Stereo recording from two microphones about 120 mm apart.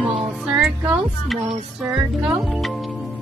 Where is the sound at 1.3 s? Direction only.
Centre (ahead or behind).